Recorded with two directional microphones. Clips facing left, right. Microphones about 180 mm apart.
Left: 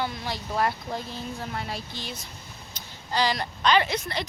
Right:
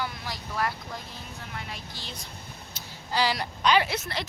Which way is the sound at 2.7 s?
5° right (ahead or behind).